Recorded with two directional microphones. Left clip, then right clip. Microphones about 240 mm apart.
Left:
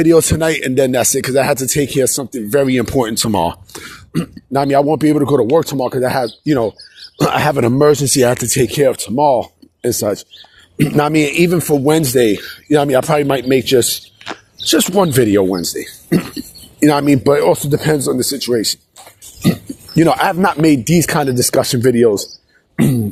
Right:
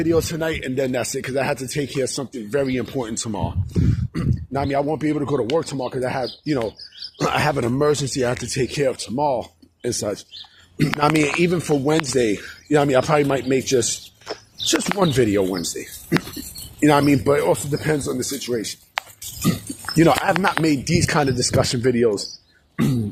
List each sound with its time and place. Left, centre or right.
0.0 s speech: left
20.0 s speech: left